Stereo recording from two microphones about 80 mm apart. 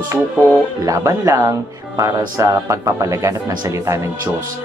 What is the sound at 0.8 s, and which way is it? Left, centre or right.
Speech, right.